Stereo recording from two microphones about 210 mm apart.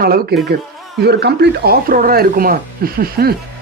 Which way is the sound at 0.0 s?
50° right (ahead or behind).